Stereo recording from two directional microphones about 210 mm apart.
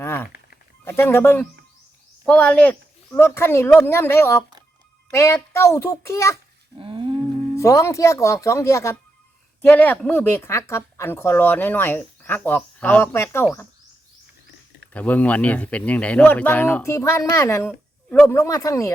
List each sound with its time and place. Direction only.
0.0 s a sound: 10° left (ahead or behind)
0.9 s a woman's voice: 10° left (ahead or behind)
6.7 s humming: 25° right (ahead or behind)
7.5 s a woman's voice: 15° left (ahead or behind)
14.9 s a woman's voice: 5° left (ahead or behind)